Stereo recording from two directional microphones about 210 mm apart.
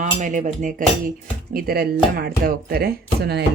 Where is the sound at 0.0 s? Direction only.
35° right (ahead or behind).